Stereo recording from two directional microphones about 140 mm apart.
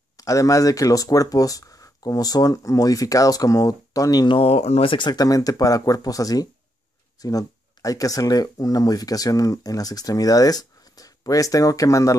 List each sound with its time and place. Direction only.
0.2 s speech: 25° left (ahead or behind)
4.4 s speech: 45° left (ahead or behind); by 12.2 s 25° left (ahead or behind)